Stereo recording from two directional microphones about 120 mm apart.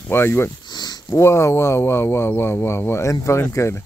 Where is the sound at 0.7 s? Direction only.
35° left (ahead or behind).